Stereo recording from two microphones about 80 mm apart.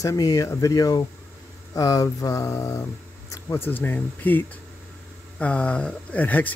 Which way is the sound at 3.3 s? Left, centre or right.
Left.